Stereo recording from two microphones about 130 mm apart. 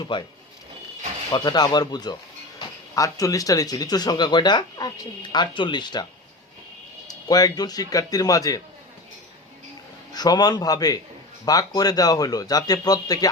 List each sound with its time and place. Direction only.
0.0 s speech: 35° left (ahead or behind)
1.3 s speech: 30° left (ahead or behind)
7.1 s a man's voice: 30° left (ahead or behind)
10.1 s a man's voice: 30° left (ahead or behind)